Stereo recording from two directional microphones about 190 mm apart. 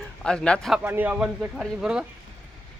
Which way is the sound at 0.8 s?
10° right (ahead or behind).